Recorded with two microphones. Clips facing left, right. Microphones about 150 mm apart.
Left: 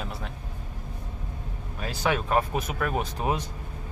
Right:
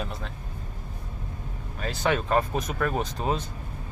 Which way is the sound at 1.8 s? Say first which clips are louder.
Right 1 dB; 10° left (ahead or behind).